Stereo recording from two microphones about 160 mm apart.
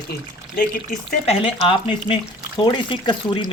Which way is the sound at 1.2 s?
35° left (ahead or behind).